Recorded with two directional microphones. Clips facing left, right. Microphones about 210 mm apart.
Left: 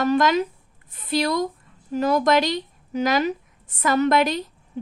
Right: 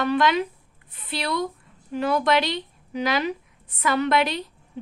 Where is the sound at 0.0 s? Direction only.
45° left (ahead or behind).